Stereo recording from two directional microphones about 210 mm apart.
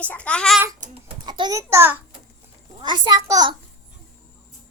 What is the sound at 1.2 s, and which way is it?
Speech, 20° right (ahead or behind).